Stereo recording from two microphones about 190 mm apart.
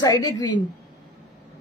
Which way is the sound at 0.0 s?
20° left (ahead or behind).